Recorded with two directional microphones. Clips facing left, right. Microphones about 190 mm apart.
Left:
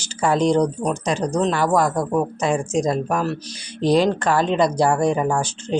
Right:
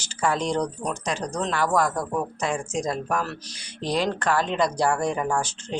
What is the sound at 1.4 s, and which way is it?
Speech, 20° left (ahead or behind).